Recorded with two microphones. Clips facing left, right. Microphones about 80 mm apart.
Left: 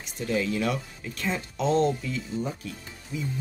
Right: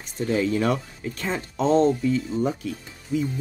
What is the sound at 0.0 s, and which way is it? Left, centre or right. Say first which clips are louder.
Speech: right 4 dB; right.